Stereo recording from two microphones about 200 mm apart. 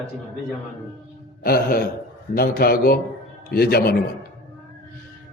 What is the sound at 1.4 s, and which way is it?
A man's voice, 50° left (ahead or behind).